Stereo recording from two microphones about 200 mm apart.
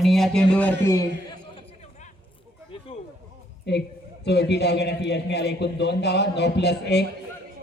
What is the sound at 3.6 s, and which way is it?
A man's voice, 55° left (ahead or behind).